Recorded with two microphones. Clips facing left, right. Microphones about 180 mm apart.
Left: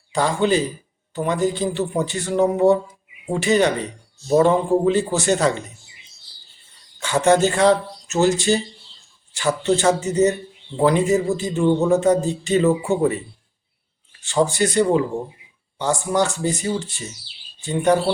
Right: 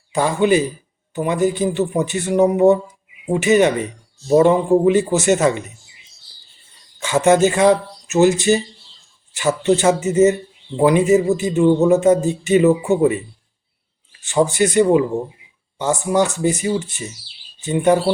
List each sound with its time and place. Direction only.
0.1 s a man's voice: 15° right (ahead or behind)
7.0 s a man's voice: 15° right (ahead or behind)
14.3 s a man's voice: 20° right (ahead or behind)